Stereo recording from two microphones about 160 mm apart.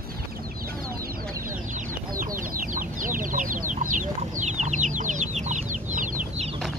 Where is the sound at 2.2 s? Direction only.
60° right (ahead or behind).